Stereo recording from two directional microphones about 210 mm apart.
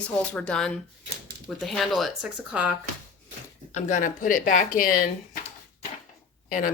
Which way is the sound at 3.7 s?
35° left (ahead or behind).